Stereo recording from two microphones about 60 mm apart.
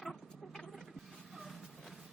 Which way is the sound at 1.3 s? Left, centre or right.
Centre.